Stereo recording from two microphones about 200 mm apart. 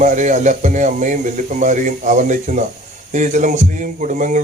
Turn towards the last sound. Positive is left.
turn(degrees=-40)  # may be behind; listen again after turning